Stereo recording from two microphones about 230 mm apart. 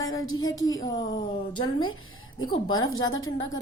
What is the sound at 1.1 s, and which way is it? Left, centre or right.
Speech, centre.